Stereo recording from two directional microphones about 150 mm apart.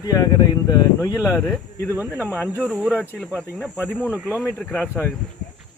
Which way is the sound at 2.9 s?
10° left (ahead or behind).